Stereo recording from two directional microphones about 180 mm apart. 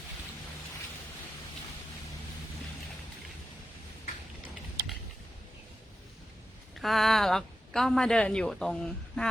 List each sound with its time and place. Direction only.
6.7 s a woman's voice: centre (ahead or behind)